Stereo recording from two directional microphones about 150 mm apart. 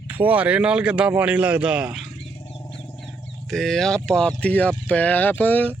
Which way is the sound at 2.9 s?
5° left (ahead or behind).